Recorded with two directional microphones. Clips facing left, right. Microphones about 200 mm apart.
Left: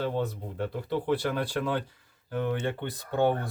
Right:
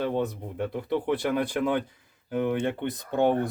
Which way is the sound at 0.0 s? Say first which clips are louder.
Right 2 dB; 15° right (ahead or behind).